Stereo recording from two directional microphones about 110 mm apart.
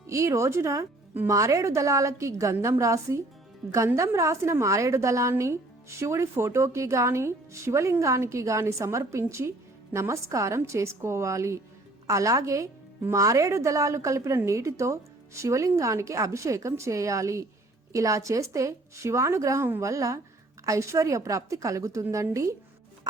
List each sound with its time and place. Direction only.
0.1 s a woman's voice: 25° right (ahead or behind)